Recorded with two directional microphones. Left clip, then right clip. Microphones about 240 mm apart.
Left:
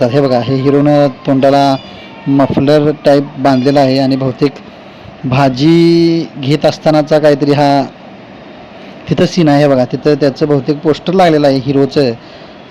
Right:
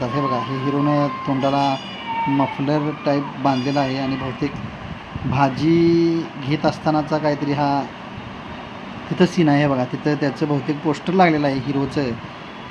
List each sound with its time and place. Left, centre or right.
0.0 s speech: left
9.1 s speech: left